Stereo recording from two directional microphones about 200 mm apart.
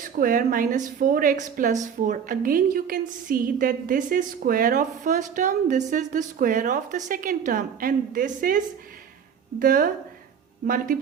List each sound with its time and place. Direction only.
0.2 s a woman's voice: 40° right (ahead or behind)